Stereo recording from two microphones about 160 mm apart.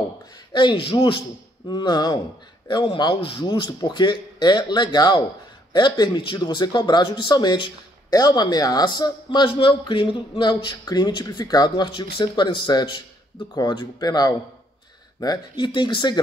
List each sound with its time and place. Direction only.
0.5 s speech: 30° left (ahead or behind)